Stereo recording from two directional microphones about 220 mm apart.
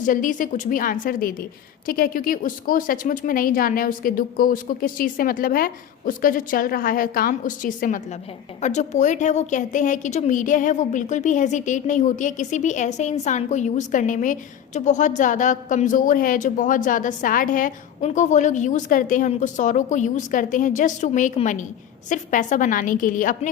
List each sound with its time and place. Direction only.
0.0 s a woman's voice: 35° left (ahead or behind)